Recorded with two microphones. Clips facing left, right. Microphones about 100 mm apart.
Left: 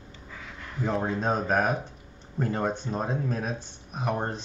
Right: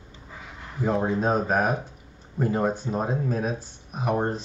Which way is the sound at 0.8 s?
15° right (ahead or behind).